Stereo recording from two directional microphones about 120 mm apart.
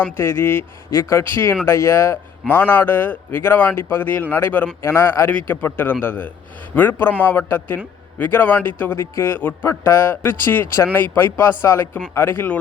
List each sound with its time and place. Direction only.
0.0 s a man's voice: 20° left (ahead or behind)